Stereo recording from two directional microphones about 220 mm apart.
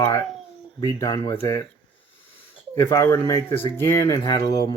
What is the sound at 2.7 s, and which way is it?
Speech, 15° left (ahead or behind).